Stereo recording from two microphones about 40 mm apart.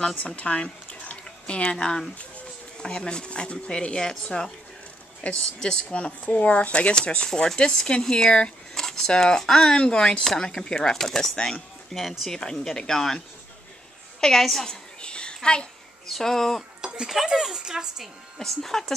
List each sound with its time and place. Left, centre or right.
0.4 s speech: left
1.2 s a sound: left
1.9 s speech: centre
5.2 s speech: left
5.6 s speech: centre
6.4 s speech: left; by 11.3 s centre
11.3 s speech: left
11.9 s speech: centre
14.2 s speech: centre
14.7 s a sound: left
16.1 s speech: centre
16.8 s a sound: centre
17.3 s a woman's voice: centre
18.4 s speech: centre